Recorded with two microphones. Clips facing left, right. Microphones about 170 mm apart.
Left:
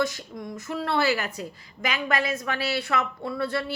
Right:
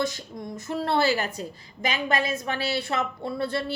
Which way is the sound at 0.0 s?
25° right (ahead or behind).